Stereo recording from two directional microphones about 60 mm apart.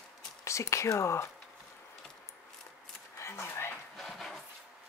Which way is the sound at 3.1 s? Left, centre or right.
Left.